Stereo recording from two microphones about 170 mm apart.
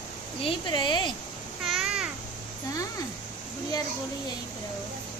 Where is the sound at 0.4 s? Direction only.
30° left (ahead or behind).